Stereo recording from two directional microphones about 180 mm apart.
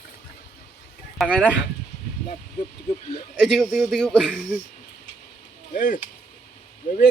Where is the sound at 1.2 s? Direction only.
5° left (ahead or behind).